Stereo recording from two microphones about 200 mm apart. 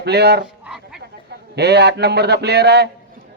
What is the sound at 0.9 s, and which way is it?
A man's voice, 55° right (ahead or behind).